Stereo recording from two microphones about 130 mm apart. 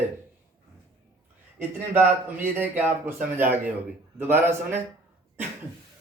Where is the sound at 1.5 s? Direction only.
15° right (ahead or behind).